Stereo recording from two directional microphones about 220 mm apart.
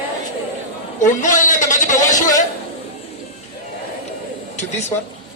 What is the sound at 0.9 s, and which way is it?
A man's voice, 35° left (ahead or behind).